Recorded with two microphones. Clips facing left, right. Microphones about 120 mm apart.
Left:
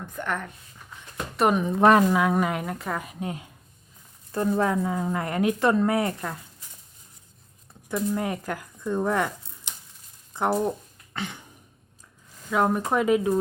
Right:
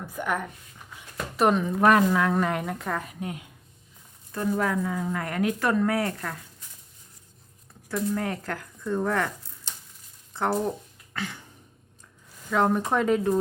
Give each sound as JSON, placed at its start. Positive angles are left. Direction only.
{"t": 0.1, "sound": "speech", "side_deg": -10}
{"t": 1.5, "sound": "a woman's voice", "side_deg": 20}
{"t": 2.1, "sound": "speech", "side_deg": 15}
{"t": 3.0, "sound": "a woman's voice", "side_deg": 20}
{"t": 7.9, "sound": "speech", "side_deg": 15}
{"t": 10.3, "sound": "a sound", "side_deg": 15}
{"t": 12.5, "sound": "speech", "side_deg": 5}